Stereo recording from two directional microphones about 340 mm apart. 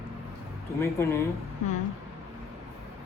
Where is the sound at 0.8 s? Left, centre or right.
Centre.